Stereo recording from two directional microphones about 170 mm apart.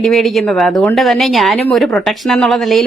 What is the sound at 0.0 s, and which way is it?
Speech, centre (ahead or behind).